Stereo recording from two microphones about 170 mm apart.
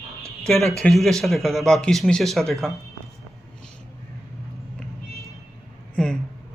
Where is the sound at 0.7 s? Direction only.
5° left (ahead or behind).